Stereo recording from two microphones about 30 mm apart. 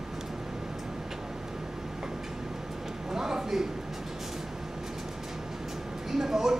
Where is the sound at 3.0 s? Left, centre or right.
Centre.